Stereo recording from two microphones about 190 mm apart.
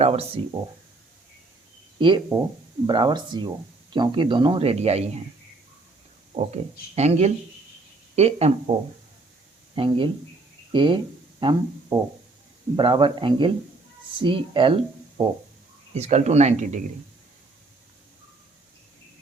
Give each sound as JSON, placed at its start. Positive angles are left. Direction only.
{"t": 0.0, "sound": "speech", "side_deg": -35}
{"t": 2.0, "sound": "speech", "side_deg": -25}
{"t": 6.3, "sound": "speech", "side_deg": -35}
{"t": 9.7, "sound": "speech", "side_deg": -25}
{"t": 16.0, "sound": "speech", "side_deg": -35}